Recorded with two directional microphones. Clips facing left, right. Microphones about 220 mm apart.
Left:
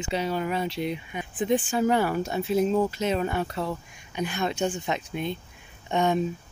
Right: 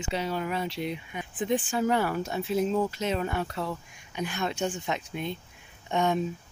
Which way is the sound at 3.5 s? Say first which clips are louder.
Left 3 dB; 25° left (ahead or behind).